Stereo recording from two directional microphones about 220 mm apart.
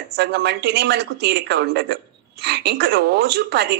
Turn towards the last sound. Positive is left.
turn(degrees=-50)  # may be behind; listen again after turning